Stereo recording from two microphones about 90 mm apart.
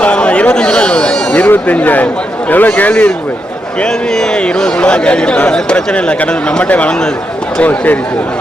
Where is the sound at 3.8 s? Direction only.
10° left (ahead or behind).